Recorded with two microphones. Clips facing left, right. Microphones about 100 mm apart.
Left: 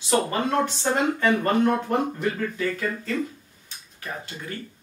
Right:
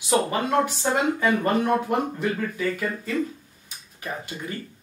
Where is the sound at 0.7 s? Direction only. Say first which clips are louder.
Even; 10° right (ahead or behind).